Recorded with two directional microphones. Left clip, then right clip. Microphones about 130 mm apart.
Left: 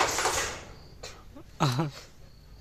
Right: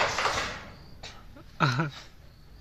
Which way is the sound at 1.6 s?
20° left (ahead or behind).